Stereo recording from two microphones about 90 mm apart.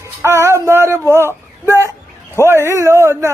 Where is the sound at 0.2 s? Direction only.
30° right (ahead or behind).